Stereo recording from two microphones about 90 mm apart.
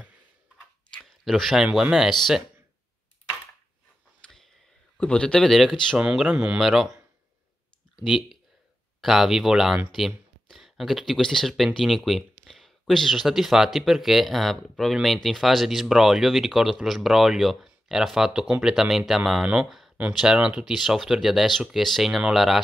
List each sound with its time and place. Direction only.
1.2 s speech: centre (ahead or behind)
4.9 s a man's voice: 10° left (ahead or behind)
5.9 s speech: 10° right (ahead or behind)
9.0 s speech: 5° right (ahead or behind)
19.4 s speech: 20° right (ahead or behind)